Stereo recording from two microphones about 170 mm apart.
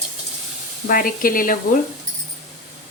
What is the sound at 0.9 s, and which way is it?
Speech, 55° left (ahead or behind).